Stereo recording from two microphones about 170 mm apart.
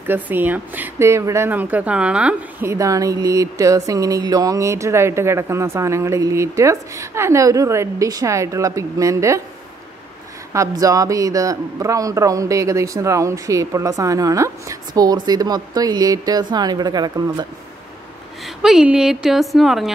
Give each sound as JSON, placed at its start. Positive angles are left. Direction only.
{"t": 0.0, "sound": "speech", "side_deg": -10}
{"t": 10.5, "sound": "a man's voice", "side_deg": -20}
{"t": 18.6, "sound": "a woman's voice", "side_deg": -5}